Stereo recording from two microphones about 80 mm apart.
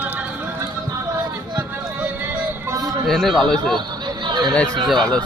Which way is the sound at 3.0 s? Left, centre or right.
Centre.